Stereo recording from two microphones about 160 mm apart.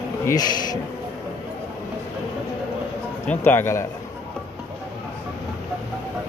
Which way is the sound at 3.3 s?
15° left (ahead or behind).